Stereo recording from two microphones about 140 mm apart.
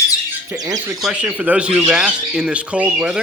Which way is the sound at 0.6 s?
25° right (ahead or behind).